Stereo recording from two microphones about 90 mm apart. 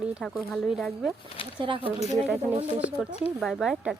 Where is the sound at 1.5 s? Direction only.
75° right (ahead or behind).